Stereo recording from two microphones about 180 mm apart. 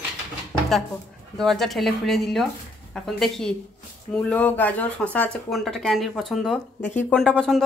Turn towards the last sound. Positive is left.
turn(degrees=5)  # may be behind; listen again after turning